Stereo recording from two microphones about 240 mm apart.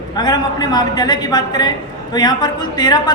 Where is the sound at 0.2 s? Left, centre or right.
Centre.